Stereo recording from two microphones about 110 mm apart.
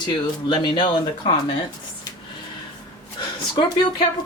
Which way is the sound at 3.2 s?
50° left (ahead or behind).